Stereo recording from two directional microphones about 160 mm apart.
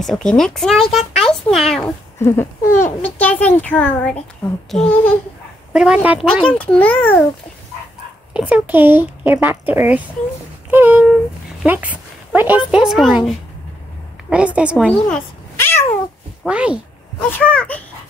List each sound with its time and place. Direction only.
0.0 s a child's voice: centre (ahead or behind)
2.1 s a child's voice: 15° left (ahead or behind); by 6.1 s 5° right (ahead or behind)
6.4 s a child's voice: 5° left (ahead or behind)
8.3 s speech: 5° right (ahead or behind)
14.9 s cat: 10° left (ahead or behind)
16.4 s speech: 5° right (ahead or behind)
17.3 s a child's voice: 10° left (ahead or behind)